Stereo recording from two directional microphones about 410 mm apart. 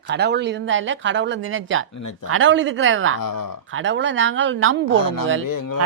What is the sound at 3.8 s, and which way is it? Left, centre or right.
Speech, right.